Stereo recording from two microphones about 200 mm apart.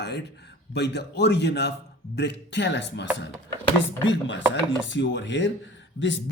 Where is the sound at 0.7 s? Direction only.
55° left (ahead or behind).